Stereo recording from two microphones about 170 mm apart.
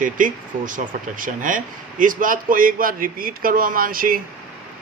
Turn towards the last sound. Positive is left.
turn(degrees=-55)  # may be behind; listen again after turning